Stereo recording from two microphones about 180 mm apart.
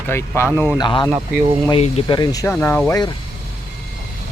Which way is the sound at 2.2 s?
20° left (ahead or behind).